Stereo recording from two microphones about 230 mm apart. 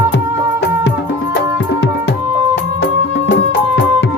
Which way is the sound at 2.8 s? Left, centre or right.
Left.